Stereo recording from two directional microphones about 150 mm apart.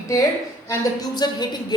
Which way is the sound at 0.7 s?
25° left (ahead or behind).